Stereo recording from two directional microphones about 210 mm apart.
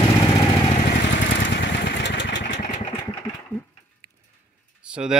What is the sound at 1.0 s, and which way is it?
Vehicle, 60° left (ahead or behind).